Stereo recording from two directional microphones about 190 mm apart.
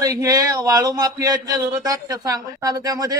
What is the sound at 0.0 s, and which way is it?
A man's voice, 20° right (ahead or behind).